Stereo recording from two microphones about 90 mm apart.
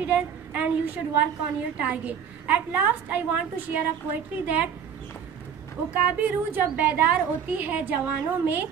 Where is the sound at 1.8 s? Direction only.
15° right (ahead or behind).